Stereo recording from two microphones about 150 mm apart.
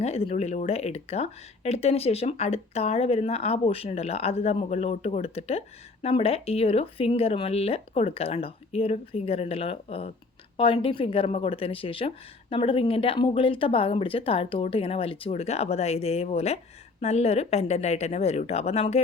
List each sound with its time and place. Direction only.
0.0 s a woman's voice: 40° left (ahead or behind)